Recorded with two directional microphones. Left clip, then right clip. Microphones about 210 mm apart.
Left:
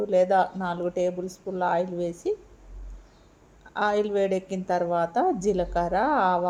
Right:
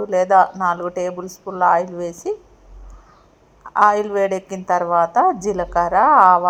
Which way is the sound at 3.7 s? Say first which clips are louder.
Right 9 dB; 5° left (ahead or behind).